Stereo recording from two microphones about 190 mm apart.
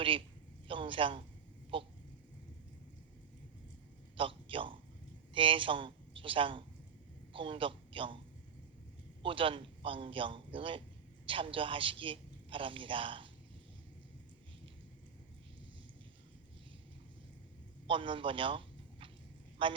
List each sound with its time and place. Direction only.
0.7 s a man's voice: 25° right (ahead or behind)
4.2 s a man's voice: 25° right (ahead or behind)
9.2 s a man's voice: 25° right (ahead or behind)
17.8 s a man's voice: 25° right (ahead or behind)